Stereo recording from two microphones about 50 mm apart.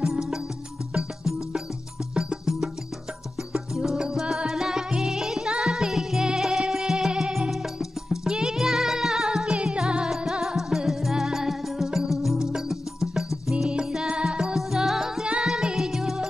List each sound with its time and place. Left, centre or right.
0.0 s music: centre
9.5 s music: right
14.4 s music: centre